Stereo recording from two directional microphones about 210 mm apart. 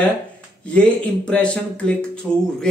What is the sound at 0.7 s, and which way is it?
A man's voice, 5° left (ahead or behind).